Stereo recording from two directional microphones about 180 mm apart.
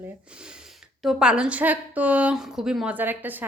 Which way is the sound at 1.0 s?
Centre (ahead or behind).